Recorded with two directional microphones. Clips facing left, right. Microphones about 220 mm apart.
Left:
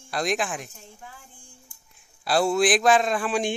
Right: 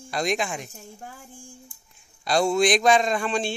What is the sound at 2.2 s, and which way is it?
Speech, 5° left (ahead or behind).